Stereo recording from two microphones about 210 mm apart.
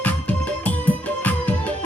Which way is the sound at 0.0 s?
5° left (ahead or behind).